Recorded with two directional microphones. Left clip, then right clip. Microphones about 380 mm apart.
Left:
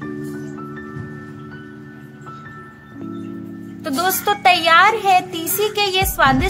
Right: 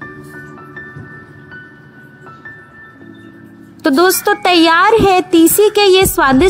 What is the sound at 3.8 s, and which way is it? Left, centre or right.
A woman's voice, right.